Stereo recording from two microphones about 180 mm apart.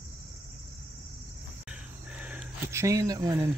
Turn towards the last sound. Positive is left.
turn(degrees=-20)  # may be behind; listen again after turning